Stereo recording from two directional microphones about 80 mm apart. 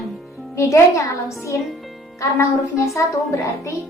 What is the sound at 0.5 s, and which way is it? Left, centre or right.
A child's voice, left.